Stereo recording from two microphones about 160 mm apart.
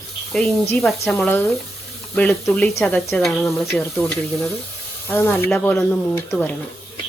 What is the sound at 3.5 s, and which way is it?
Speech, centre (ahead or behind).